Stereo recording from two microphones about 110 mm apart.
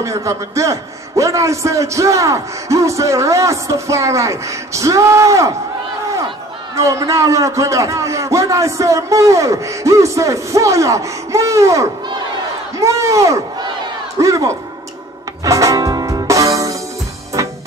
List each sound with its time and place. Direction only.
0.0 s a man's voice: 30° right (ahead or behind)
6.7 s a man's voice: 30° right (ahead or behind)
15.4 s music: 30° right (ahead or behind)